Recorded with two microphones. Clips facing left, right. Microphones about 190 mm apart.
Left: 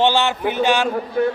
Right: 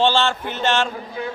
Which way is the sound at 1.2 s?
55° left (ahead or behind).